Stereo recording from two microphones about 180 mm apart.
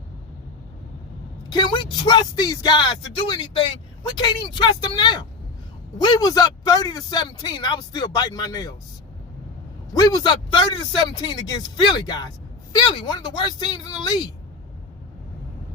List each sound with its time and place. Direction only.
1.5 s speech: 25° left (ahead or behind)
9.9 s speech: 25° left (ahead or behind)